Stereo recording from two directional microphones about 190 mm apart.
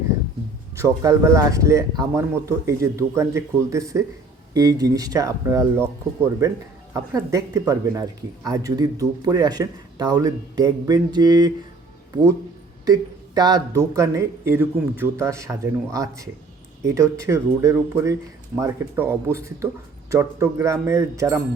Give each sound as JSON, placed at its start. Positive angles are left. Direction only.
{"t": 0.8, "sound": "speech", "side_deg": -15}
{"t": 12.8, "sound": "speech", "side_deg": -20}